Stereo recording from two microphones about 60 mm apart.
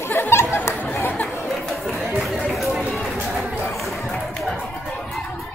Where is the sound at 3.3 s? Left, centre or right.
Centre.